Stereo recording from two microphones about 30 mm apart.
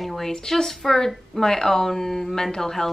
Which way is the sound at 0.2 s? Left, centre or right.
Centre.